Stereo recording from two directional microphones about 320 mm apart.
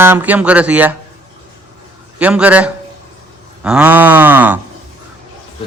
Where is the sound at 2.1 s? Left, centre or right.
Centre.